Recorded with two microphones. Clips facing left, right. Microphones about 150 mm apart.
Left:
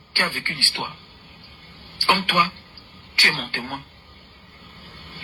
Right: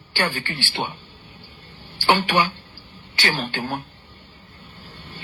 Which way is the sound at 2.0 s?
35° right (ahead or behind).